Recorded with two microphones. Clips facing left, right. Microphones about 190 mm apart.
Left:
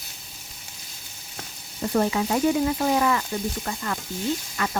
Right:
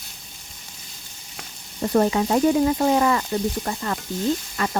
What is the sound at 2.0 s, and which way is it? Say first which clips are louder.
Speech: right 4 dB; 40° right (ahead or behind).